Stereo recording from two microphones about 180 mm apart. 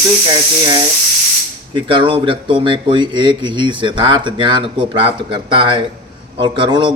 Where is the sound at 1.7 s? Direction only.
30° right (ahead or behind).